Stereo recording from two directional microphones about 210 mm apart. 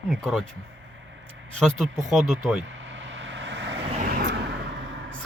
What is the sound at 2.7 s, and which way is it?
Vehicle, 60° right (ahead or behind).